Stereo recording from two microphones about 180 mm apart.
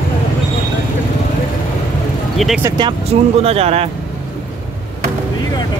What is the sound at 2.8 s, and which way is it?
Speech, 30° right (ahead or behind).